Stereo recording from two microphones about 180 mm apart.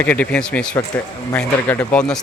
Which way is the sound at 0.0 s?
10° left (ahead or behind).